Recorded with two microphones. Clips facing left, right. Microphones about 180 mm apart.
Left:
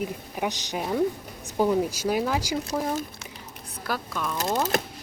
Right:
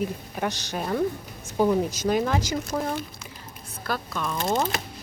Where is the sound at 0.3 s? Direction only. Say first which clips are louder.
Even; 15° left (ahead or behind).